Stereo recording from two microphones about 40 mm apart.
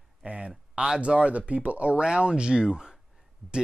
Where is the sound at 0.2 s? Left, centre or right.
Right.